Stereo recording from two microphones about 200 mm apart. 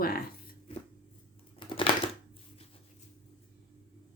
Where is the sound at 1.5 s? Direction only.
25° left (ahead or behind).